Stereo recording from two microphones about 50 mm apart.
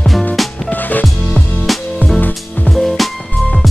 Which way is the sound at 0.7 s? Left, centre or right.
Left.